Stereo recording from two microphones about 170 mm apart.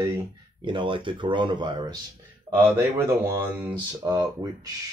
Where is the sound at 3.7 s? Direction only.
20° right (ahead or behind).